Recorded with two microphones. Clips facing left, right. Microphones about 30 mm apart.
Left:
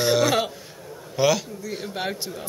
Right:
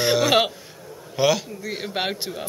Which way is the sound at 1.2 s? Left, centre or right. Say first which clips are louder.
Right 1 dB; centre.